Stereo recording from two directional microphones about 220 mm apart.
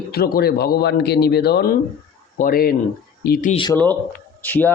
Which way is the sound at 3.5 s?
20° left (ahead or behind).